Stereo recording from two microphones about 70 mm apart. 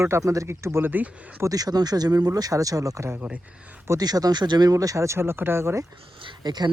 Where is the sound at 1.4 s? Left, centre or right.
Right.